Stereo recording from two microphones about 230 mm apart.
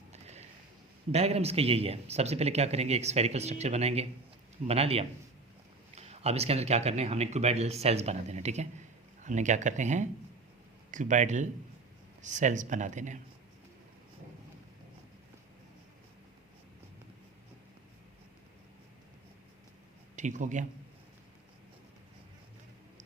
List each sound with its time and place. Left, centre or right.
0.1 s a sound: right
1.1 s speech: right
20.1 s speech: right